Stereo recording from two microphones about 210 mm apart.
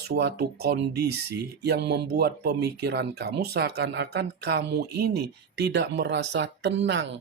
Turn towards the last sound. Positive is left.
turn(degrees=-60)  # may be behind; listen again after turning